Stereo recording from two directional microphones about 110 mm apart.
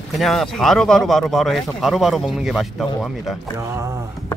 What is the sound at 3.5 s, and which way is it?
Speech, 25° right (ahead or behind).